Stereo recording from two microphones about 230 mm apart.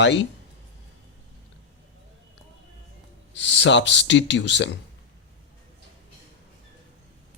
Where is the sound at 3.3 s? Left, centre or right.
Left.